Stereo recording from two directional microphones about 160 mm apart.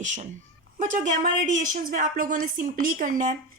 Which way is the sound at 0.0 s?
50° right (ahead or behind).